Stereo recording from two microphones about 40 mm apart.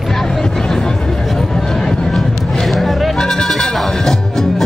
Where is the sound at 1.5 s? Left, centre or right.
Centre.